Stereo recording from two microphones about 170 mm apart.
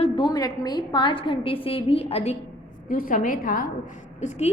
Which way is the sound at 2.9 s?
55° left (ahead or behind).